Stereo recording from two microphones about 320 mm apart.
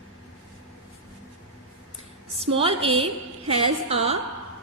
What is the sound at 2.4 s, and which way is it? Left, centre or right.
Speech, centre.